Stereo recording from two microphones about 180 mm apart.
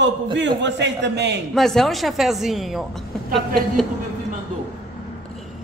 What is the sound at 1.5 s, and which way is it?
A man's voice, centre (ahead or behind).